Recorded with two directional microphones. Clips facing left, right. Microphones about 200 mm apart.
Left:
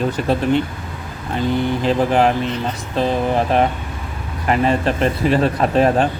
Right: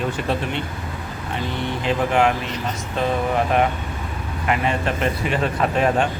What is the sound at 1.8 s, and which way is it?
Speech, 35° left (ahead or behind).